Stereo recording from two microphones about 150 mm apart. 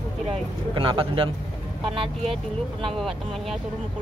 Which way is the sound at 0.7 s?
35° right (ahead or behind).